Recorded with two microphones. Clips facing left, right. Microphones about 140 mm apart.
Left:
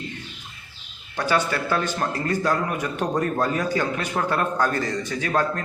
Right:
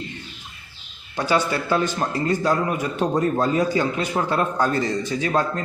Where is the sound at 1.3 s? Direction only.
15° right (ahead or behind).